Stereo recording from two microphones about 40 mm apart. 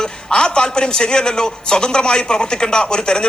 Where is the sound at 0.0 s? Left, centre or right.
Left.